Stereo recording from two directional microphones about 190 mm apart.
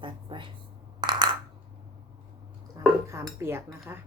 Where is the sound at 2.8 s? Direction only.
15° right (ahead or behind).